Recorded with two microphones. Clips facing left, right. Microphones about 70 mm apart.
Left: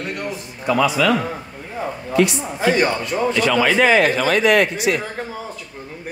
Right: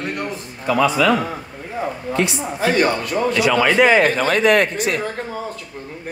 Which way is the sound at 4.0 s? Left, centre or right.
Right.